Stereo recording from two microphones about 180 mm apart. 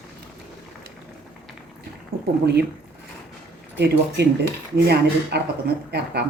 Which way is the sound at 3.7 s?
65° right (ahead or behind).